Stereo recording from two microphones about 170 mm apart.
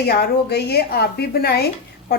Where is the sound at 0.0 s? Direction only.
70° left (ahead or behind).